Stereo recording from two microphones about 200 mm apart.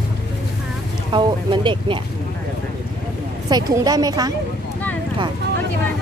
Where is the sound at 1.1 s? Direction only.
25° right (ahead or behind).